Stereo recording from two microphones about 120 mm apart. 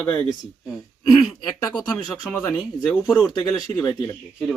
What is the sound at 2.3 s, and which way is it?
Speech, 10° left (ahead or behind).